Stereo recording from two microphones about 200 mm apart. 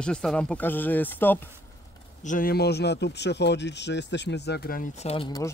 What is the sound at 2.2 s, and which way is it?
Speech, 40° left (ahead or behind).